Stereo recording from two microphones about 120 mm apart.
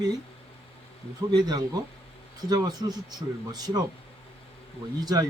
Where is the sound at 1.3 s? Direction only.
35° right (ahead or behind).